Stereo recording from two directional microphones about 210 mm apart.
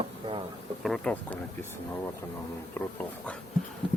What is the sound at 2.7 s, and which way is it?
Speech, 10° left (ahead or behind).